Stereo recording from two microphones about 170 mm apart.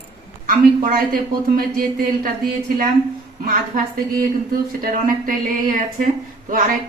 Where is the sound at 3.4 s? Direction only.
55° right (ahead or behind).